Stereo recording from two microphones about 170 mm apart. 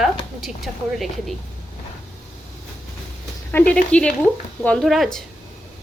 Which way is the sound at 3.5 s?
5° left (ahead or behind).